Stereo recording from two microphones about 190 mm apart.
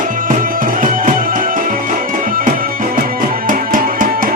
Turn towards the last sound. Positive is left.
turn(degrees=-45)  # may be behind; listen again after turning